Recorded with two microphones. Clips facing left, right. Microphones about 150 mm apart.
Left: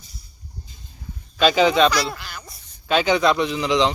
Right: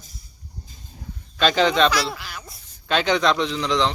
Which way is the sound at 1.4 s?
5° left (ahead or behind).